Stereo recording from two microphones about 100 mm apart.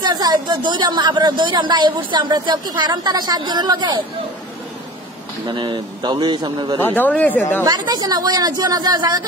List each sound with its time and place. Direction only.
0.0 s a woman's voice: 40° right (ahead or behind)
5.5 s a woman's voice: 50° right (ahead or behind)
6.8 s speech: 20° left (ahead or behind)
7.6 s speech: 40° right (ahead or behind)